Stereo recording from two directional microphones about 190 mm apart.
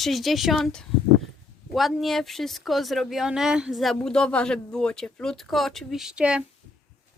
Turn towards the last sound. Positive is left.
turn(degrees=-5)  # may be behind; listen again after turning